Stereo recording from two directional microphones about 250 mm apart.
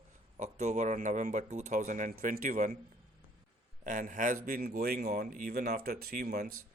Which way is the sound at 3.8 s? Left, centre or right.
Right.